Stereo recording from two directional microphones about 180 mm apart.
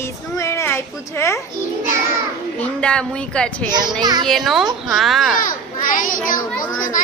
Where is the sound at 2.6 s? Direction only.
5° left (ahead or behind).